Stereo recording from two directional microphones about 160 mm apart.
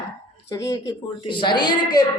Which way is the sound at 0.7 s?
25° left (ahead or behind).